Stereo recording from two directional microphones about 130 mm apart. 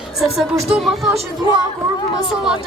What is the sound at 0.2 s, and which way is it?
A woman's voice, centre (ahead or behind).